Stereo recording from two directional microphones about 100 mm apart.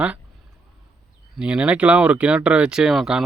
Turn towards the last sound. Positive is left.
turn(degrees=-5)  # may be behind; listen again after turning